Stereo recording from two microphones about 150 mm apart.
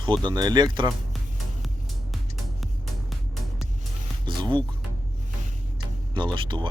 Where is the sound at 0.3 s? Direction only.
30° right (ahead or behind).